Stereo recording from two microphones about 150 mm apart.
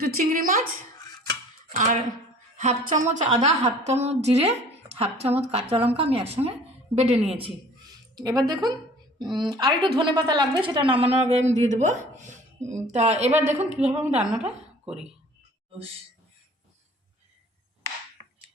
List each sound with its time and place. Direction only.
0.0 s a woman's voice: 75° right (ahead or behind)
1.7 s a woman's voice: 55° right (ahead or behind)
7.3 s a woman's voice: 30° right (ahead or behind); by 13.3 s 50° right (ahead or behind)
13.6 s a woman's voice: 10° right (ahead or behind)